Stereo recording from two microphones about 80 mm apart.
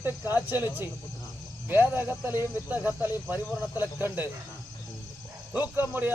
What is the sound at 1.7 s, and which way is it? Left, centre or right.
Speech, right.